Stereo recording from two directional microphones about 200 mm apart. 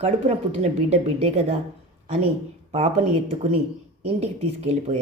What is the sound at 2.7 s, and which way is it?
Speech, 35° right (ahead or behind).